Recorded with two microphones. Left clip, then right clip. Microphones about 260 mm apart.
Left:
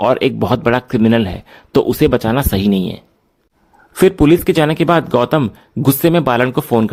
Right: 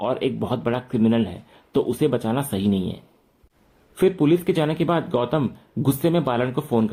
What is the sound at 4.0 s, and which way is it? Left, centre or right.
Speech, left.